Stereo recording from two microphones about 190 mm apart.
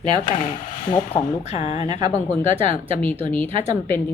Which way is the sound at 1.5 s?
35° left (ahead or behind).